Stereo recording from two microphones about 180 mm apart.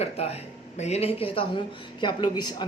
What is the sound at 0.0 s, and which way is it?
A man's voice, 35° left (ahead or behind).